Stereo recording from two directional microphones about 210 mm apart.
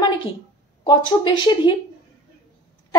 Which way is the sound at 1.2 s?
20° left (ahead or behind).